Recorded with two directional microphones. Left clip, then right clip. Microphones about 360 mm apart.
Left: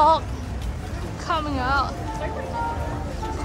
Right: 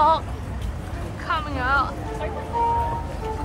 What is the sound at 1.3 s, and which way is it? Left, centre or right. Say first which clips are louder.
Speech: right 1 dB; centre.